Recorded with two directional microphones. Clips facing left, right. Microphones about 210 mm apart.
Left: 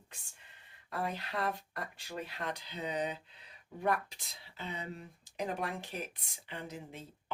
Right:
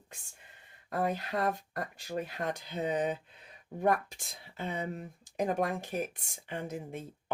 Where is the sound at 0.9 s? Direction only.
45° right (ahead or behind).